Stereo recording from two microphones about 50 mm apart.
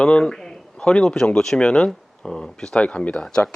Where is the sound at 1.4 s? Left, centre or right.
Centre.